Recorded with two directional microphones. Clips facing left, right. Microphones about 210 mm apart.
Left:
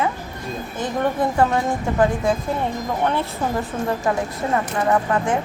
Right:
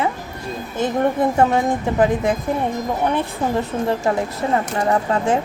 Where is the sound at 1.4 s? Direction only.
20° right (ahead or behind).